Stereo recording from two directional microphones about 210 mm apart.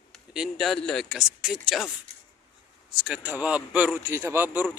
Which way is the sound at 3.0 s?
5° right (ahead or behind).